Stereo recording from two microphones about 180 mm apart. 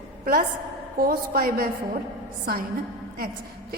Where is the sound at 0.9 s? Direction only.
55° right (ahead or behind).